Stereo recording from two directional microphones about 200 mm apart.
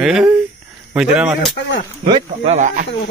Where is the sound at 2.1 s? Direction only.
30° right (ahead or behind).